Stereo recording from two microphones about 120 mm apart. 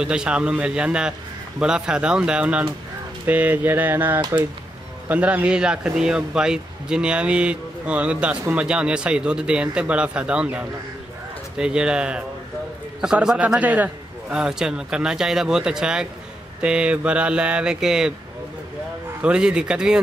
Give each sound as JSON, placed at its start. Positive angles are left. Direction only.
{"t": 0.0, "sound": "speech", "side_deg": -5}
{"t": 19.2, "sound": "speech", "side_deg": -5}